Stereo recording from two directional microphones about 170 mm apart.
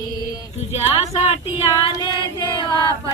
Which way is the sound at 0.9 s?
35° left (ahead or behind).